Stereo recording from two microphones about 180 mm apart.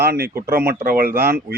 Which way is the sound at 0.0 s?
60° right (ahead or behind).